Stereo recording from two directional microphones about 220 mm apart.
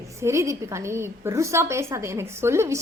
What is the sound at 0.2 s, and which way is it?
A woman's voice, 15° right (ahead or behind).